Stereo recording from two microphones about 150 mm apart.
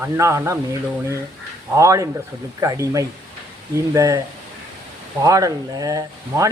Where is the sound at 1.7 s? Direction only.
20° right (ahead or behind).